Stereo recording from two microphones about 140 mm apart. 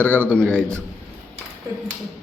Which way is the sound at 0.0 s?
15° right (ahead or behind).